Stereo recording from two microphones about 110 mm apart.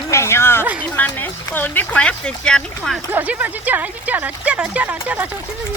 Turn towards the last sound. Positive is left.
turn(degrees=-15)  # may be behind; listen again after turning